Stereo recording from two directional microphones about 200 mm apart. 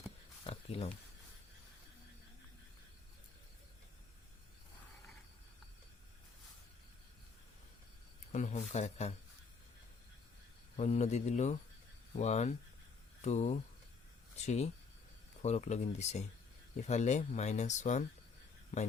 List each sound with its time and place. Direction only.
0.4 s a sound: 30° left (ahead or behind)
8.3 s speech: 35° left (ahead or behind)
10.8 s speech: 35° left (ahead or behind)